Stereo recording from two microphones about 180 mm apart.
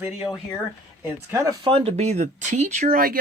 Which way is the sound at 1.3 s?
20° right (ahead or behind).